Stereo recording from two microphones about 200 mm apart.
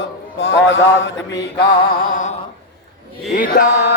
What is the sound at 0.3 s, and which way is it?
Speech, 65° left (ahead or behind).